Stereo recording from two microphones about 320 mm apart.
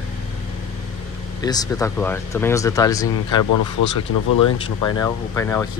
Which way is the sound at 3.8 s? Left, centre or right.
Left.